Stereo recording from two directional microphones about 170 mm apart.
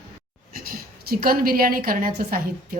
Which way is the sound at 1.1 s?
60° right (ahead or behind).